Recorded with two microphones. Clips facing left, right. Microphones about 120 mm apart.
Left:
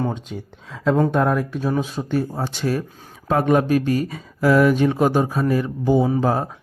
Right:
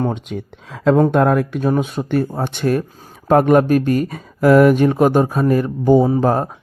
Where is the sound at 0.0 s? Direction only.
65° right (ahead or behind).